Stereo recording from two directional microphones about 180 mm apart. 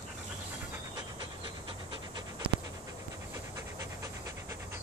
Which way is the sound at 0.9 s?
20° right (ahead or behind).